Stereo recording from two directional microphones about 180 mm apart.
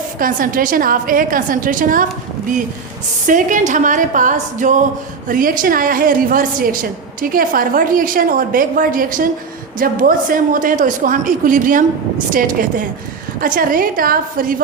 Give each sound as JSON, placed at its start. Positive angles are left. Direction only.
{"t": 0.2, "sound": "a woman's voice", "side_deg": -50}
{"t": 3.2, "sound": "a woman's voice", "side_deg": -45}